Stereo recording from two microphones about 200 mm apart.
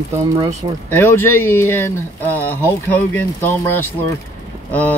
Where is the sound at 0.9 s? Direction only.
10° left (ahead or behind).